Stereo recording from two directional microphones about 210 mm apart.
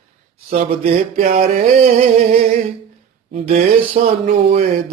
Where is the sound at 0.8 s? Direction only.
30° right (ahead or behind).